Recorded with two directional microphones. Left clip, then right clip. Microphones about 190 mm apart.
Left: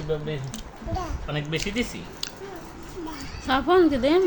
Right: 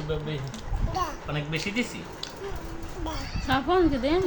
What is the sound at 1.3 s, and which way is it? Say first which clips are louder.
Speech: left 2 dB; 35° left (ahead or behind).